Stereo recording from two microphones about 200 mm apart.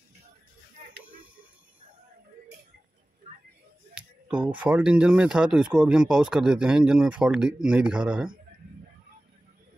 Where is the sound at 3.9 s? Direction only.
5° right (ahead or behind).